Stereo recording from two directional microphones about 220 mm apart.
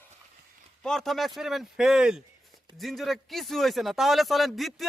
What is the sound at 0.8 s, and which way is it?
Speech, centre (ahead or behind).